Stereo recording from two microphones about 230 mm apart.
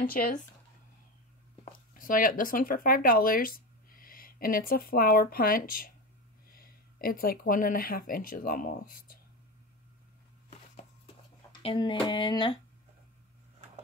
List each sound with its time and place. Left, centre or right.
0.0 s speech: left
1.6 s speech: left
11.6 s speech: left